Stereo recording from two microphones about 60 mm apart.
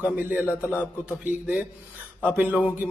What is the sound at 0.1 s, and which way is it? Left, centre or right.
A man's voice, right.